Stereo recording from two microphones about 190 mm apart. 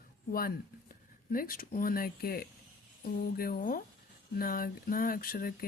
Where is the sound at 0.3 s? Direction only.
50° left (ahead or behind).